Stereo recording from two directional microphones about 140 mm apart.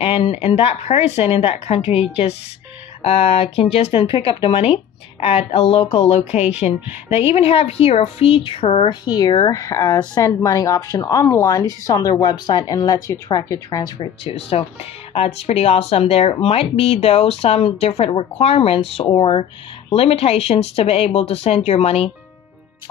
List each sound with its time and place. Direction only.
0.0 s a woman's voice: 45° left (ahead or behind); by 13.9 s 25° left (ahead or behind)
13.9 s speech: 40° left (ahead or behind)